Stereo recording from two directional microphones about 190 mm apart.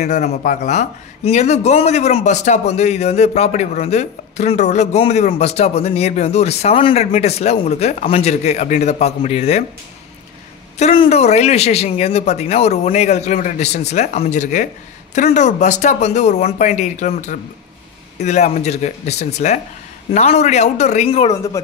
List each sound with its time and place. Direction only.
0.0 s speech: 35° left (ahead or behind)
10.8 s speech: 35° left (ahead or behind)
21.3 s speech: 15° left (ahead or behind)